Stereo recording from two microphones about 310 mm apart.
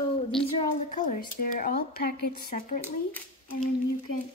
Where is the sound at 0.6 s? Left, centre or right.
Left.